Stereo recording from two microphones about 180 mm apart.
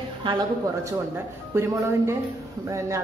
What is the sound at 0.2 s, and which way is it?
Speech, 30° right (ahead or behind).